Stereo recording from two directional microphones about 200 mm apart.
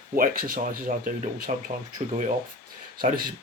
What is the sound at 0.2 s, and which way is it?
Speech, 45° right (ahead or behind).